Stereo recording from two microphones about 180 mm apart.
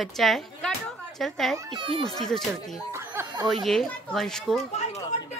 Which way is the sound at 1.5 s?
25° right (ahead or behind).